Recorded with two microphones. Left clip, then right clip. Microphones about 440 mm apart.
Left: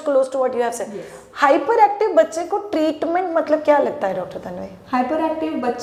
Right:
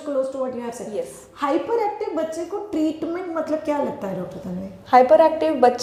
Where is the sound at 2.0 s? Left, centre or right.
Left.